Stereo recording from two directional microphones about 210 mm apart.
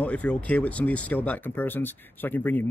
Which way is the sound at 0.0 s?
5° left (ahead or behind).